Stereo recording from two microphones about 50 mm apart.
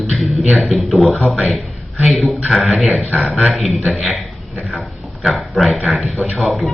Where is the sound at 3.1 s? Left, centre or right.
Right.